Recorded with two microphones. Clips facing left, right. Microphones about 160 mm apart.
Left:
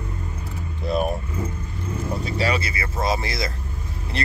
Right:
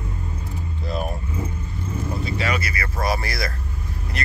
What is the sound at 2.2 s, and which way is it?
Speech, 35° left (ahead or behind).